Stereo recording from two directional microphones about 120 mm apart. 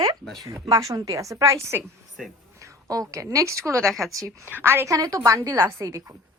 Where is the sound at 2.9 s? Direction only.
25° right (ahead or behind).